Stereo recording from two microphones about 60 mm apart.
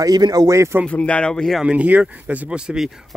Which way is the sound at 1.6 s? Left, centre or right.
Right.